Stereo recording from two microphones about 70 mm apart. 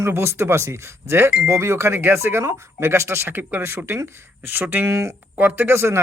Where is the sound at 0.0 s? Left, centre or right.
Right.